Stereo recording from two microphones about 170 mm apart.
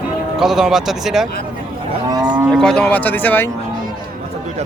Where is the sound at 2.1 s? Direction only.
20° right (ahead or behind).